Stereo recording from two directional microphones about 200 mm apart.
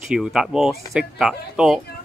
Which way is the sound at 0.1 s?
5° right (ahead or behind).